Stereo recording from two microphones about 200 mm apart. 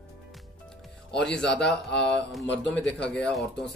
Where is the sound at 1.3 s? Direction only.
5° left (ahead or behind).